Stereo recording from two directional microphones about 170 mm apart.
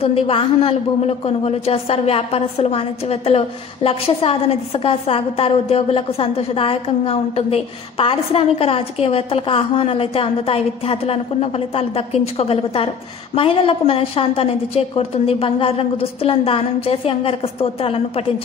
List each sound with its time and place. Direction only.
0.0 s a woman's voice: 35° left (ahead or behind)